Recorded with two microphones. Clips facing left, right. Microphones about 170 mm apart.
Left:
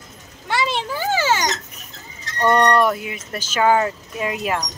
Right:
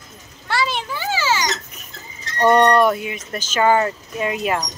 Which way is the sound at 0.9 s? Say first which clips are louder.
Left 2 dB; 50° left (ahead or behind).